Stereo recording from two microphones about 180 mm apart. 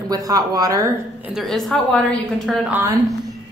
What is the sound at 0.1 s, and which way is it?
Speech, 20° right (ahead or behind).